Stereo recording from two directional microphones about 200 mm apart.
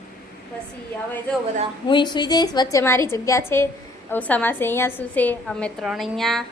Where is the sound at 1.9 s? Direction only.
25° left (ahead or behind).